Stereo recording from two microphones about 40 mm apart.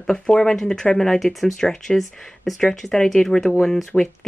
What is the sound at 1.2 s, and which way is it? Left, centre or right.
Speech, centre.